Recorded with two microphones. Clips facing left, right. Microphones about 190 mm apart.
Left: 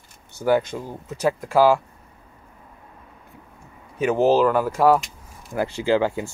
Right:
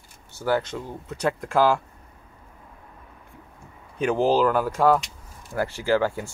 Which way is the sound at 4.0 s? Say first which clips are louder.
Left 3 dB; 5° left (ahead or behind).